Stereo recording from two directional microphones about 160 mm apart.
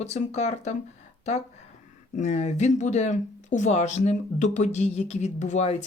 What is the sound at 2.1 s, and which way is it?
Speech, 45° left (ahead or behind).